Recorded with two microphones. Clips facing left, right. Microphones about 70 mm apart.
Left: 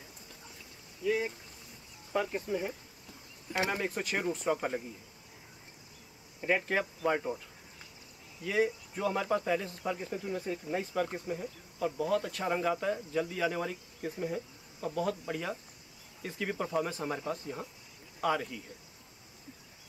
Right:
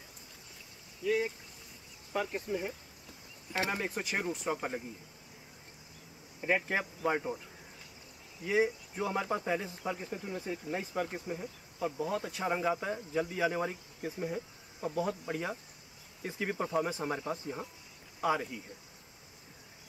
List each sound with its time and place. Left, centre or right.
1.0 s a sound: centre
2.1 s speech: centre
6.4 s speech: centre
8.5 s speech: centre
14.0 s speech: centre